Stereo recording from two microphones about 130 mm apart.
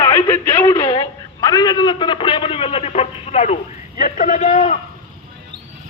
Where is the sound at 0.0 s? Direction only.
30° left (ahead or behind); by 3.6 s 55° left (ahead or behind).